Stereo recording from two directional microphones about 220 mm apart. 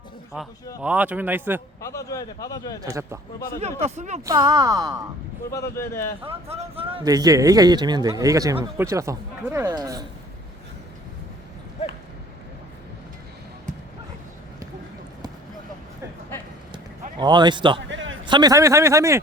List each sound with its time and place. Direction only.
0.8 s speech: 5° right (ahead or behind)
1.8 s a man's voice: 15° left (ahead or behind)
2.8 s speech: 15° right (ahead or behind)
3.6 s speech: 30° right (ahead or behind)
4.3 s speech: 20° right (ahead or behind)
5.5 s a man's voice: 15° left (ahead or behind)
6.2 s speech: 25° right (ahead or behind)
16.7 s a sound: 20° right (ahead or behind)
17.7 s a sound: 55° right (ahead or behind)
18.3 s speech: 20° right (ahead or behind)